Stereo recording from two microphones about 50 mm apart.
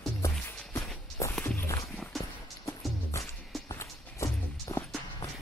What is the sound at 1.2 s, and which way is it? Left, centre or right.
Walk, left.